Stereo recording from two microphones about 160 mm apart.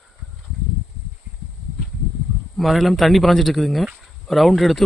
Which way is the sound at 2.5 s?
Centre (ahead or behind).